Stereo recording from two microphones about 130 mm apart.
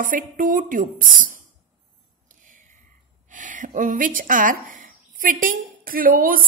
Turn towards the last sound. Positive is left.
turn(degrees=-90)